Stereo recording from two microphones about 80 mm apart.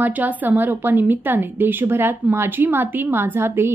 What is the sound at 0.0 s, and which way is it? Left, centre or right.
A woman's voice, right.